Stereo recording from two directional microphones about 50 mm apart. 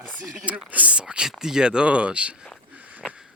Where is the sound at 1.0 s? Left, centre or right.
Centre.